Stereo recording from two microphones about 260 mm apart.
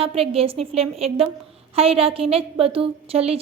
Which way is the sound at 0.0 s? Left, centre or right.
Right.